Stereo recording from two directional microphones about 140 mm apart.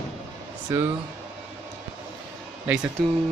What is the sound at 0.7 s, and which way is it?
Speech, 20° right (ahead or behind).